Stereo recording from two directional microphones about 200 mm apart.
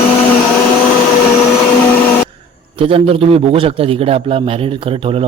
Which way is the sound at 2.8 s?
25° right (ahead or behind).